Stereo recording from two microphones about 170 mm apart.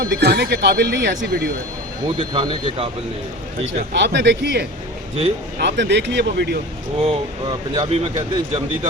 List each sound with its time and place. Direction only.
0.0 s speech: 75° right (ahead or behind)
2.0 s speech: 30° right (ahead or behind)
3.7 s speech: 90° right
7.8 s speech: 35° right (ahead or behind)